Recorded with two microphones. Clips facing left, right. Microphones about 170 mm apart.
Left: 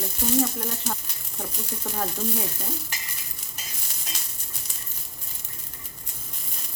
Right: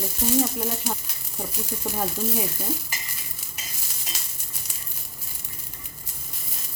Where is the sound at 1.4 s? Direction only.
10° right (ahead or behind).